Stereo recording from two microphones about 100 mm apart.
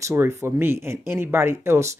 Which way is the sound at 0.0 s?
25° right (ahead or behind).